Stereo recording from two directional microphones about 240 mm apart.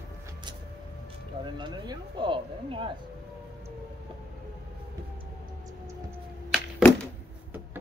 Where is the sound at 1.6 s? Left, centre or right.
Centre.